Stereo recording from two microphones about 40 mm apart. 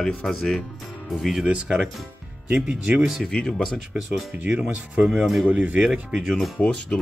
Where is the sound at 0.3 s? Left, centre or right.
Centre.